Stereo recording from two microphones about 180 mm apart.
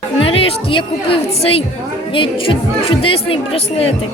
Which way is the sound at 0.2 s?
30° left (ahead or behind).